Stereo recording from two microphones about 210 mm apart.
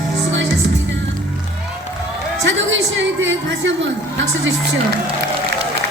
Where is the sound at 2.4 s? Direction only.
60° right (ahead or behind).